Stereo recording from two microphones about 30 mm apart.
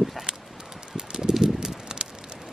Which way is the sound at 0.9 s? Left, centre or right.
Right.